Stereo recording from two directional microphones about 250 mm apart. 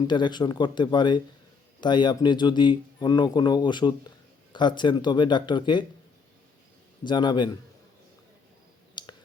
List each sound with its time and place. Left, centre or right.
0.1 s speech: centre
7.0 s speech: centre
9.0 s clicking: centre